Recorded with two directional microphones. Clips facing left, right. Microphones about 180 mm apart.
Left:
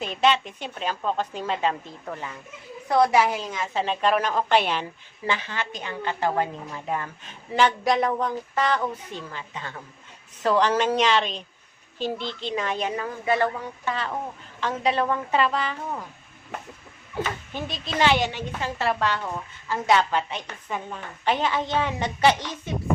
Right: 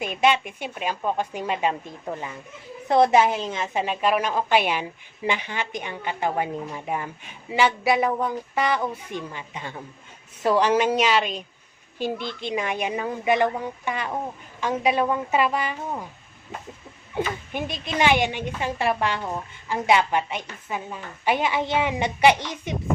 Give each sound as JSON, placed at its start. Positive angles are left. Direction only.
{"t": 0.0, "sound": "a woman's voice", "side_deg": -10}
{"t": 3.8, "sound": "speech", "side_deg": -10}
{"t": 17.2, "sound": "speech", "side_deg": -15}